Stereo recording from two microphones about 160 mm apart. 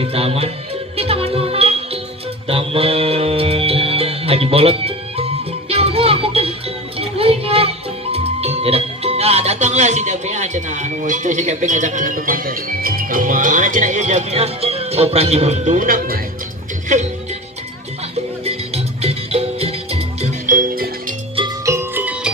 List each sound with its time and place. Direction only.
0.0 s music: 40° right (ahead or behind)
7.0 s speech: 35° right (ahead or behind); by 16.2 s 65° right (ahead or behind)
18.4 s music: 40° right (ahead or behind)
20.5 s music: 60° right (ahead or behind)
21.6 s music: 15° right (ahead or behind)